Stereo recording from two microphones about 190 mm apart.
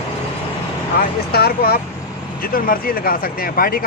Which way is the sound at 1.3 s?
55° left (ahead or behind).